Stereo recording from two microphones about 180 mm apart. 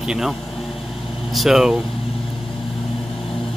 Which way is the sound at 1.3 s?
Centre (ahead or behind).